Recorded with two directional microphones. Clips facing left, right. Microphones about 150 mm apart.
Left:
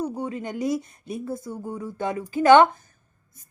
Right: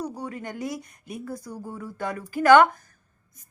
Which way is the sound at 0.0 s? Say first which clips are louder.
Left 4 dB; 20° left (ahead or behind).